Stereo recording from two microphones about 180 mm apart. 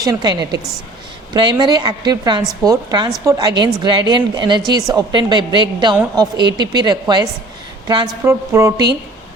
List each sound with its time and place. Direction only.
0.0 s a woman's voice: 20° right (ahead or behind)